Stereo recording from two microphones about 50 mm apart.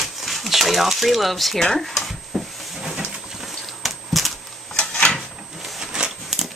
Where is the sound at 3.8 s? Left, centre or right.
Centre.